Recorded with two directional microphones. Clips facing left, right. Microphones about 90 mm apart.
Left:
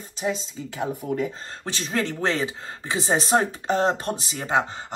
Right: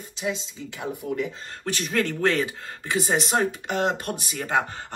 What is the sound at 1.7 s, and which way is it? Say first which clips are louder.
Speech: right 1 dB; 20° left (ahead or behind).